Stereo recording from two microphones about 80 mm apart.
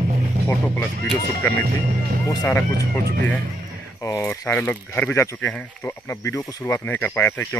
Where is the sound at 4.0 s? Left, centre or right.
Left.